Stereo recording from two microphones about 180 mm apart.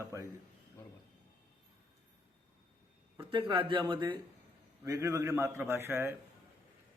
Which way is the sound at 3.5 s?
30° right (ahead or behind).